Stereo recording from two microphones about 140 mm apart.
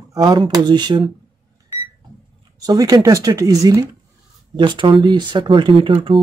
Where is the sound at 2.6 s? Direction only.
25° right (ahead or behind).